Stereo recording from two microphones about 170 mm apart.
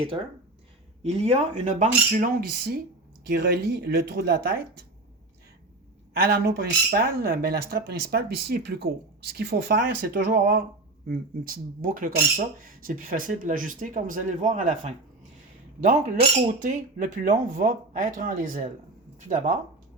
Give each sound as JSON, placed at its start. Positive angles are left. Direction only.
{"t": 1.0, "sound": "speech", "side_deg": -40}
{"t": 6.1, "sound": "speech", "side_deg": -65}